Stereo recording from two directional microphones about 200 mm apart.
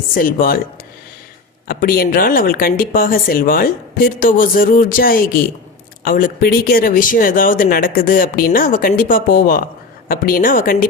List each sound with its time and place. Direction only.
0.1 s speech: 45° left (ahead or behind)
1.6 s speech: 45° left (ahead or behind)